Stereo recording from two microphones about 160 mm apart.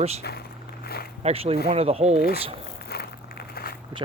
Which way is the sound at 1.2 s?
40° right (ahead or behind).